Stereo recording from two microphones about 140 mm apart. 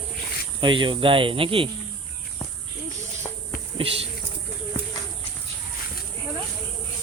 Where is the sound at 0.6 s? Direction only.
35° right (ahead or behind).